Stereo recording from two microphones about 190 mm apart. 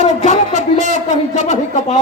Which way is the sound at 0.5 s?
40° right (ahead or behind).